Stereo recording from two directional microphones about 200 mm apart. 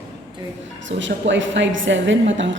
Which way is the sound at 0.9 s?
65° right (ahead or behind).